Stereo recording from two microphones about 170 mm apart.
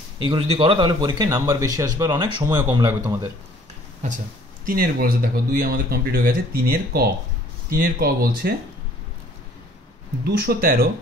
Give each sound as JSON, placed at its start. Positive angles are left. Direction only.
{"t": 0.3, "sound": "speech", "side_deg": -30}
{"t": 4.6, "sound": "speech", "side_deg": -60}
{"t": 10.2, "sound": "speech", "side_deg": -70}